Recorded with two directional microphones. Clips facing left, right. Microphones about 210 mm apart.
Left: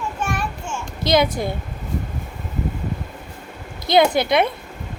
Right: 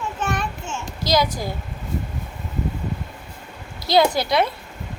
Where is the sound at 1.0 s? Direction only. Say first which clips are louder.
Left 3 dB; 25° left (ahead or behind).